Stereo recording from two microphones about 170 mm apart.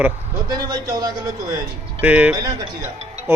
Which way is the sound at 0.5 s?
25° right (ahead or behind).